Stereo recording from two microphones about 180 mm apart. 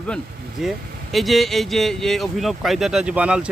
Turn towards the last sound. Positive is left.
turn(degrees=-5)  # may be behind; listen again after turning